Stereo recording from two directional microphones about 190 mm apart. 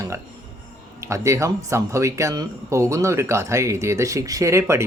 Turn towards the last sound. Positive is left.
turn(degrees=-15)  # may be behind; listen again after turning